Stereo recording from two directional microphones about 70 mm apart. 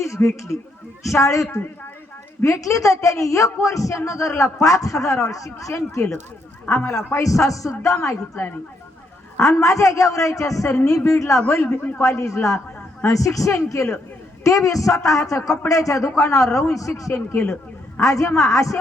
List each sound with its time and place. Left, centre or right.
0.0 s a man's voice: left
8.0 s a woman's voice: left
9.4 s a man's voice: left
17.4 s a sound: centre
18.0 s a man's voice: left